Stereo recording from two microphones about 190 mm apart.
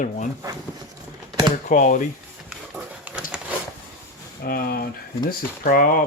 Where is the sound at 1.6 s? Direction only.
40° left (ahead or behind).